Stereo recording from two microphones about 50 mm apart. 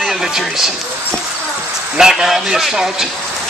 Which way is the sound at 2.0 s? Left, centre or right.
Centre.